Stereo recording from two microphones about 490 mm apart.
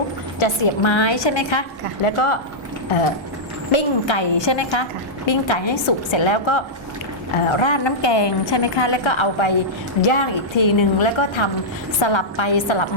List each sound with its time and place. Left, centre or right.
0.3 s a woman's voice: left
2.0 s speech: left
3.7 s a woman's voice: left